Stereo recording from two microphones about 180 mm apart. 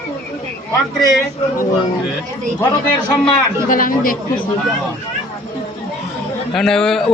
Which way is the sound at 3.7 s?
50° left (ahead or behind).